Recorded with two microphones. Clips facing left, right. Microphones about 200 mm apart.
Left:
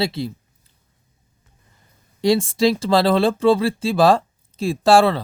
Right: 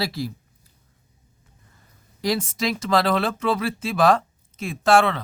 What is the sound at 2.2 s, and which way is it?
Speech, 30° left (ahead or behind).